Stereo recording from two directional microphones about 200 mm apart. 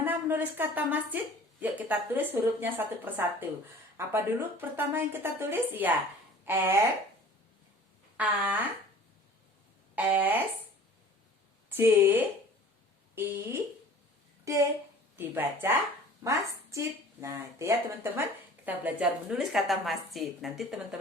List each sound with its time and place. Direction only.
0.0 s a woman's voice: 10° right (ahead or behind)
8.1 s a woman's voice: 10° right (ahead or behind)
9.9 s a woman's voice: 10° right (ahead or behind)
11.8 s a woman's voice: 10° right (ahead or behind)
15.1 s a woman's voice: 10° right (ahead or behind)